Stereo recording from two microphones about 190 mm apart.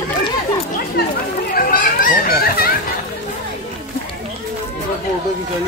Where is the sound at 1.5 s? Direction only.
45° left (ahead or behind).